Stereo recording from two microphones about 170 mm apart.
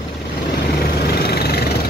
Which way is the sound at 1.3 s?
70° left (ahead or behind).